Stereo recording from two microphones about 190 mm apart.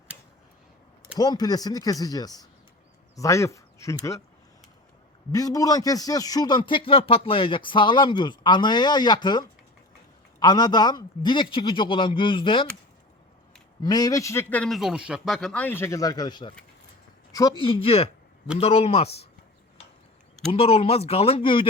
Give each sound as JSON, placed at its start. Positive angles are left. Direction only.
{"t": 1.2, "sound": "speech", "side_deg": 20}
{"t": 5.3, "sound": "speech", "side_deg": 20}
{"t": 13.8, "sound": "speech", "side_deg": 20}
{"t": 17.6, "sound": "speech", "side_deg": 30}
{"t": 20.5, "sound": "speech", "side_deg": 30}